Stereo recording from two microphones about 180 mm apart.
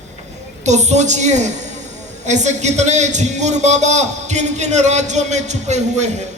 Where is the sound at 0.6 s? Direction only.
40° right (ahead or behind).